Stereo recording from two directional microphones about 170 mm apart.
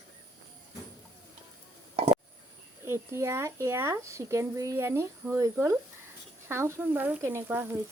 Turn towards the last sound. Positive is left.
turn(degrees=-15)  # may be behind; listen again after turning